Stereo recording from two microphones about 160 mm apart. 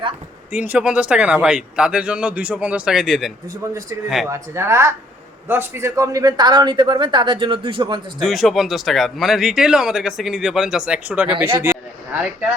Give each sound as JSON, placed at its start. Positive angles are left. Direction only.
{"t": 0.5, "sound": "a man's voice", "side_deg": -10}
{"t": 3.6, "sound": "a man's voice", "side_deg": -20}
{"t": 8.2, "sound": "speech", "side_deg": 0}